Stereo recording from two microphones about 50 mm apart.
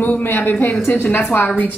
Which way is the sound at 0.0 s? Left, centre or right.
Left.